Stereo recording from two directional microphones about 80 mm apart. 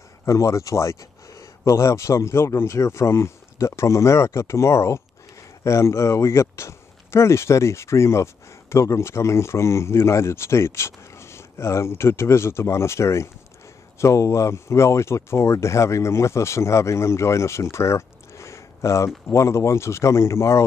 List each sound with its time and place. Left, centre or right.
0.2 s speech: left